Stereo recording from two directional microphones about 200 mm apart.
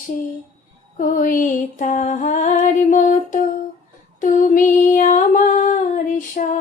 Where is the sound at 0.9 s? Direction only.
40° left (ahead or behind).